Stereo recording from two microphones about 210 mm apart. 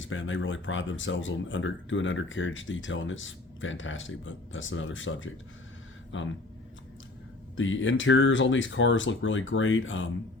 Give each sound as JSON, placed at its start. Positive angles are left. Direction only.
{"t": 0.0, "sound": "speech", "side_deg": 65}
{"t": 7.5, "sound": "speech", "side_deg": 65}